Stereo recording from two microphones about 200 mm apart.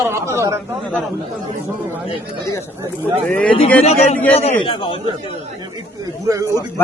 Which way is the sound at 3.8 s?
35° left (ahead or behind).